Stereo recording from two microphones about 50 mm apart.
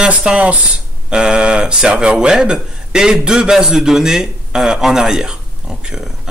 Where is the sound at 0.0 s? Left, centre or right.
Right.